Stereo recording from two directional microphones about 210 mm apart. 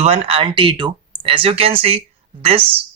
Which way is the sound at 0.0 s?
30° right (ahead or behind).